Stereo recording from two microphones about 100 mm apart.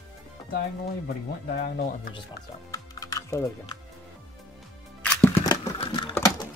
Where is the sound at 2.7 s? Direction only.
35° left (ahead or behind).